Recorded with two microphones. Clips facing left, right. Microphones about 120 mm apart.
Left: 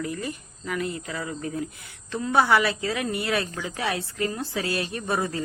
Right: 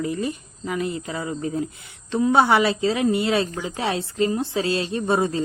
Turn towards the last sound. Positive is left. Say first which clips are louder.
# right 6 dB
turn(degrees=-25)  # may be behind; listen again after turning